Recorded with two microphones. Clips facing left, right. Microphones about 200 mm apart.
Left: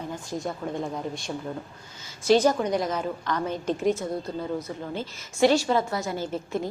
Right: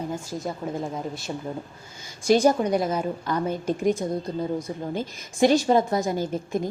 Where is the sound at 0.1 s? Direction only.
5° right (ahead or behind).